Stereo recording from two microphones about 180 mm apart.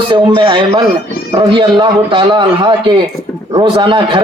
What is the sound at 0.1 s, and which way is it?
A man's voice, 25° right (ahead or behind).